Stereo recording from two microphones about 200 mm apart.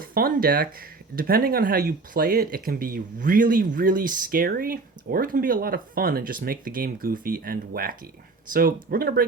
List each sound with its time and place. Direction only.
0.0 s speech: 45° right (ahead or behind)